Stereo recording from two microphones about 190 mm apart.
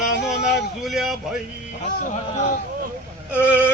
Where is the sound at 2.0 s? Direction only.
40° left (ahead or behind).